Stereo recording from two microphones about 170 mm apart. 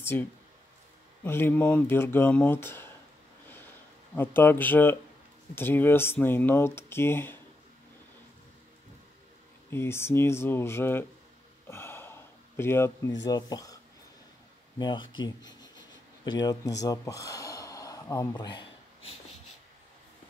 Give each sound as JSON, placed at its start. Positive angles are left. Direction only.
{"t": 0.0, "sound": "speech", "side_deg": 15}
{"t": 4.1, "sound": "speech", "side_deg": 10}
{"t": 9.7, "sound": "speech", "side_deg": 15}
{"t": 11.6, "sound": "a sound", "side_deg": 15}
{"t": 13.2, "sound": "speech", "side_deg": 20}
{"t": 14.8, "sound": "speech", "side_deg": 25}